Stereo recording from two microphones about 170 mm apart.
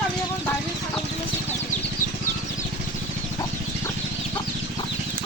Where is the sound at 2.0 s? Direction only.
50° left (ahead or behind).